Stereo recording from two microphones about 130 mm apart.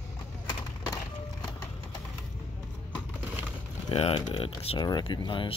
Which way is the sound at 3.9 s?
45° left (ahead or behind).